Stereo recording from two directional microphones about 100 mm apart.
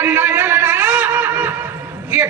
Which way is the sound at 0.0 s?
20° right (ahead or behind).